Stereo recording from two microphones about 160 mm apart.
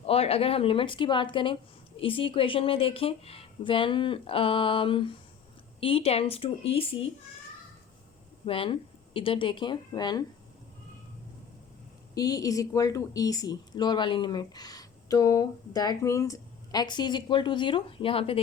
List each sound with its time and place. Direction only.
0.0 s a woman's voice: 40° left (ahead or behind)
8.4 s a woman's voice: 35° left (ahead or behind)
12.1 s a woman's voice: 20° left (ahead or behind)